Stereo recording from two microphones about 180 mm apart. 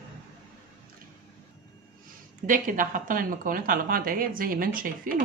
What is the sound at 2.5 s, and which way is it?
A woman's voice, 45° right (ahead or behind).